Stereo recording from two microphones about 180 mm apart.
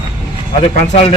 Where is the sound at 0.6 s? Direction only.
35° left (ahead or behind).